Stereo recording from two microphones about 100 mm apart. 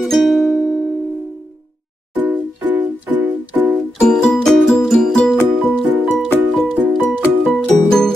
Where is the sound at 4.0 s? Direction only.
5° left (ahead or behind).